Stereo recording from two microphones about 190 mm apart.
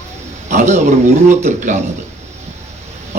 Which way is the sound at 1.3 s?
40° right (ahead or behind).